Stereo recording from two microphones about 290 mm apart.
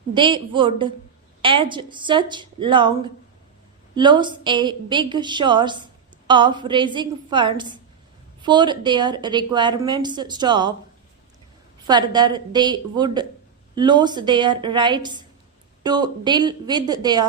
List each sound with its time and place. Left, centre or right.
0.1 s a woman's voice: centre
11.9 s a woman's voice: centre